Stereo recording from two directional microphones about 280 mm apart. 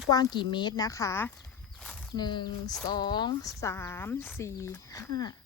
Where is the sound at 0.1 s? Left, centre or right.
Centre.